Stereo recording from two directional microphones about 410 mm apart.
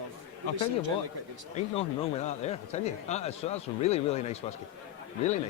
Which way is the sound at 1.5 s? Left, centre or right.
Centre.